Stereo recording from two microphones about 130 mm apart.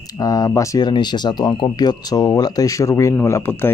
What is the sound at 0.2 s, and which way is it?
Speech, 25° left (ahead or behind).